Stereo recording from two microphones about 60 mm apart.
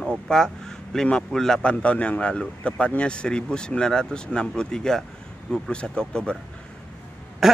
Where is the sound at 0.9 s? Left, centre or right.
Centre.